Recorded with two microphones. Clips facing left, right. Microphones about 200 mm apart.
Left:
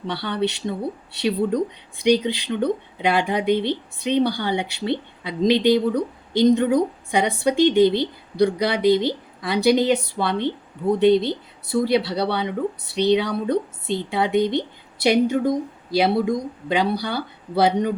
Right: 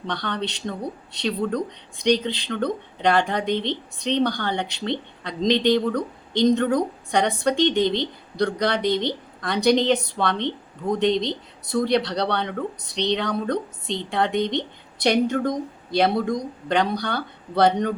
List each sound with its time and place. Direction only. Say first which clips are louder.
0.1 s a woman's voice: left 4 dB; 10° left (ahead or behind)
7.9 s a woman's voice: left 3 dB; 20° right (ahead or behind)
8.4 s a woman's voice: left 3 dB; 10° left (ahead or behind)